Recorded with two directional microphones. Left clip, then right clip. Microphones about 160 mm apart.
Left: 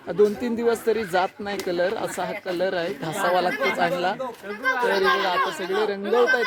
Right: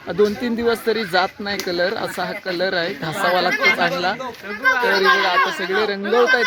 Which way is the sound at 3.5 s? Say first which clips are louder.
Right 7 dB; 60° left (ahead or behind).